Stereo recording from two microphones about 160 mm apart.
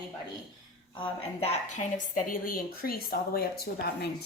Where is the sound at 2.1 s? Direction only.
60° left (ahead or behind).